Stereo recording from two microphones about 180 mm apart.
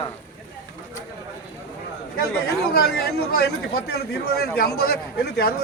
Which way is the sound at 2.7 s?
60° left (ahead or behind).